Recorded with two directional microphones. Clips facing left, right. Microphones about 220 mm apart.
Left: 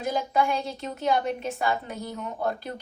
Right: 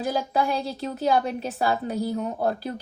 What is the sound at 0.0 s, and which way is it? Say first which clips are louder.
Speech: right 1 dB; 35° right (ahead or behind).